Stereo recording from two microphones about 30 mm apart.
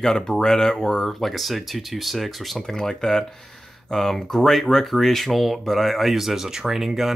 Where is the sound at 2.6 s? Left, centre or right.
Centre.